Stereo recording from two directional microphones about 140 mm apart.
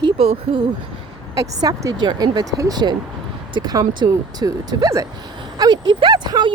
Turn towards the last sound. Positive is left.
turn(degrees=-35)  # may be behind; listen again after turning